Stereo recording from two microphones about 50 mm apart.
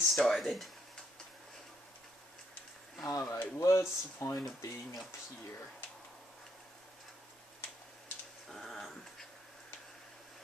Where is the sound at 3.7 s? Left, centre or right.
Left.